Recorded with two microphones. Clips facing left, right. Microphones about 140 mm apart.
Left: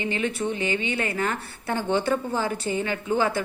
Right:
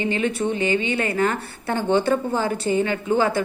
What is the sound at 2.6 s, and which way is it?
Speech, 25° right (ahead or behind).